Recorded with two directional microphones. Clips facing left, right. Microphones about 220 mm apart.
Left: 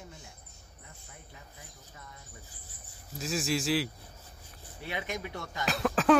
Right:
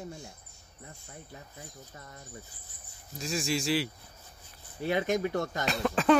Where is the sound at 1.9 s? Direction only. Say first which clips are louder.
Right 3 dB; 40° right (ahead or behind).